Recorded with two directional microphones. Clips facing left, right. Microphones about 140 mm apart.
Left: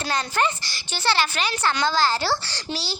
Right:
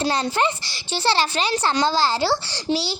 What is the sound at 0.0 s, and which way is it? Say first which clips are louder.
A child's voice: right 3 dB; 30° right (ahead or behind).